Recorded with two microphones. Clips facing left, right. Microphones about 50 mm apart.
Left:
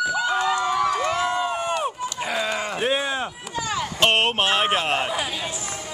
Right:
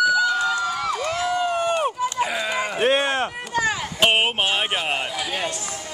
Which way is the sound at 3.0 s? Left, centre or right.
Right.